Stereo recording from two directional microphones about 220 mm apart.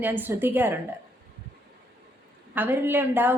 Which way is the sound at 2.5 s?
10° right (ahead or behind).